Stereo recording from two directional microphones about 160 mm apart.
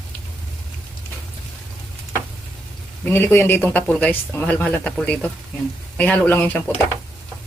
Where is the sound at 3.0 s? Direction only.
15° left (ahead or behind).